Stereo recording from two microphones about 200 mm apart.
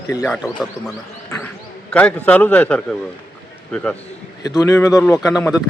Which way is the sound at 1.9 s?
5° left (ahead or behind).